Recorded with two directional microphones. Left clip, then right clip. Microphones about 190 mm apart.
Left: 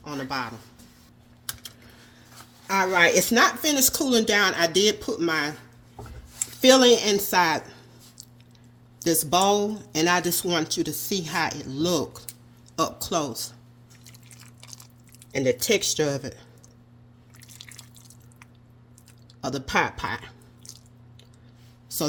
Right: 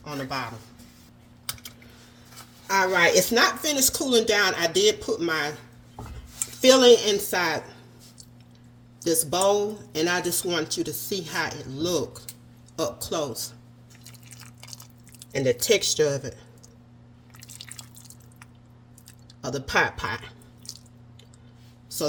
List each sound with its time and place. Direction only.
0.0 s a man's voice: 30° left (ahead or behind)
2.6 s speech: 35° left (ahead or behind)
6.6 s speech: 35° left (ahead or behind)
9.0 s speech: 40° left (ahead or behind)
14.4 s a sound: 10° right (ahead or behind)
15.3 s speech: 25° left (ahead or behind)
19.4 s speech: 35° left (ahead or behind)
20.7 s a sound: 5° right (ahead or behind)